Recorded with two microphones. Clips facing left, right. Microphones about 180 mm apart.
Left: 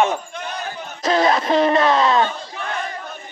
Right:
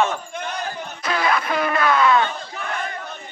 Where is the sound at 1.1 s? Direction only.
25° left (ahead or behind).